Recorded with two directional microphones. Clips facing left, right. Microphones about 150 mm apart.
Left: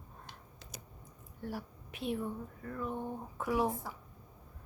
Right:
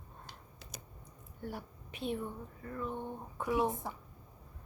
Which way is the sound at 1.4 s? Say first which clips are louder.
Left 2 dB; centre (ahead or behind).